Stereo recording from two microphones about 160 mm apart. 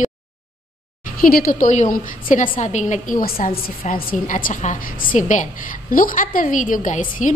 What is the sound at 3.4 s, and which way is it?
A woman's voice, 60° left (ahead or behind).